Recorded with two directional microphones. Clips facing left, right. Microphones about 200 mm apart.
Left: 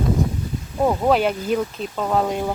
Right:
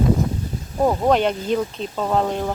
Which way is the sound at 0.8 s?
Centre (ahead or behind).